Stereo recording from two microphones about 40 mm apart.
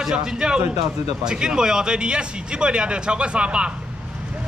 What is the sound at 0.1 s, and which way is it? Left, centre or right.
Speech, centre.